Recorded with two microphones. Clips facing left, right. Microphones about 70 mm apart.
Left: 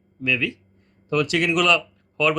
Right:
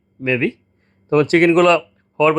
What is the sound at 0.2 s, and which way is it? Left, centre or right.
Speech, right.